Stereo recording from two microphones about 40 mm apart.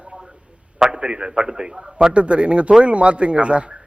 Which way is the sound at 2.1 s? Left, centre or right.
Right.